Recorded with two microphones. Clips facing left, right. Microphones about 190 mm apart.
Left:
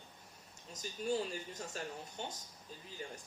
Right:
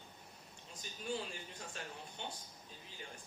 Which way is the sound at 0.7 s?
40° left (ahead or behind).